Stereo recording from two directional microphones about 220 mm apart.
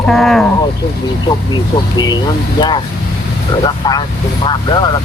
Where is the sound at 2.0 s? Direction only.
20° left (ahead or behind).